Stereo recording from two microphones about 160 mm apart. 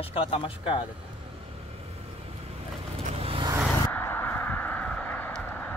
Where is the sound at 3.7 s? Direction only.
10° left (ahead or behind).